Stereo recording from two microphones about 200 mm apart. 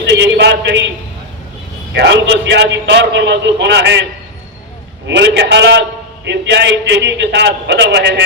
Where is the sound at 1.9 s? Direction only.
60° right (ahead or behind).